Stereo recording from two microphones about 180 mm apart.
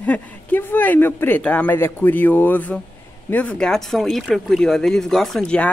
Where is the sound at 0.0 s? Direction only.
10° left (ahead or behind).